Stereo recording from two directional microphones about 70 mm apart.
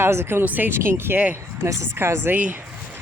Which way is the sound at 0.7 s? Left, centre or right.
Right.